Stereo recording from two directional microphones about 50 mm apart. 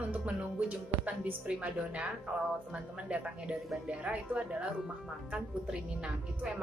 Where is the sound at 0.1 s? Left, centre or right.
Right.